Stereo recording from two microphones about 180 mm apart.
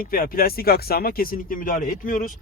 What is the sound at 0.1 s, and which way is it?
Speech, 55° left (ahead or behind).